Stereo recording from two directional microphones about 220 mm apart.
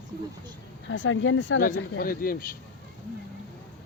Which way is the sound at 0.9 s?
60° left (ahead or behind).